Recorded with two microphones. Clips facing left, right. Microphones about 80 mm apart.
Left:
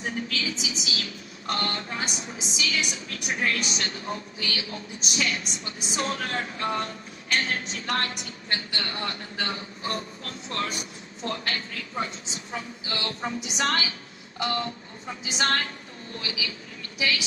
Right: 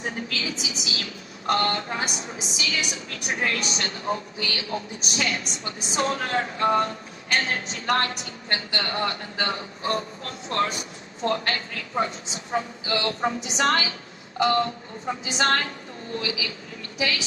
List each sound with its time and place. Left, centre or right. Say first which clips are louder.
0.3 s a woman's voice: even; right
11.3 s a woman's voice: right 5 dB; right